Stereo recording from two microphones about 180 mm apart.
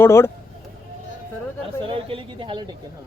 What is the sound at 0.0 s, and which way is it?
Speech, 15° left (ahead or behind).